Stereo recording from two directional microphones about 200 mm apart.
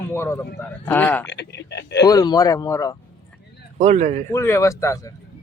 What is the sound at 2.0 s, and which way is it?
Speech, 20° left (ahead or behind).